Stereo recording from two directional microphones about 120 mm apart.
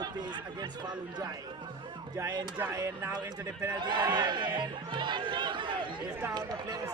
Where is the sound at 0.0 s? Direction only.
40° right (ahead or behind).